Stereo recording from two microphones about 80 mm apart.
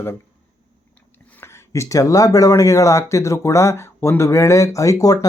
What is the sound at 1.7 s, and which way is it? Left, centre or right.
Speech, left.